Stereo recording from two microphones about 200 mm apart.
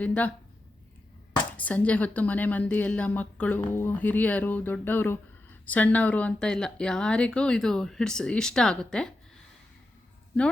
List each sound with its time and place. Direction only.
0.0 s a woman's voice: 5° left (ahead or behind)
1.5 s a woman's voice: 5° left (ahead or behind)